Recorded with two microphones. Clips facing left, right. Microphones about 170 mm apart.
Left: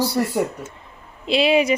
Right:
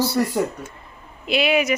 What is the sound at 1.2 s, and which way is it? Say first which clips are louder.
Speech: left 3 dB; 30° left (ahead or behind).